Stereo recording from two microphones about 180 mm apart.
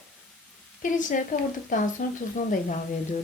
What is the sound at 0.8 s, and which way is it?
A woman's voice, 45° left (ahead or behind).